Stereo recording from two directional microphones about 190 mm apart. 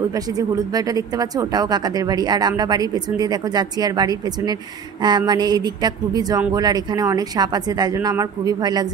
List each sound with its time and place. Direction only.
0.1 s speech: 15° right (ahead or behind)